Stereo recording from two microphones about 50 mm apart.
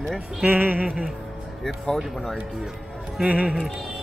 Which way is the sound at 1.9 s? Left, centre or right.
Centre.